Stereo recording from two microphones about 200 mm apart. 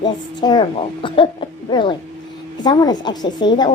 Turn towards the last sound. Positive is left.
turn(degrees=20)  # may be behind; listen again after turning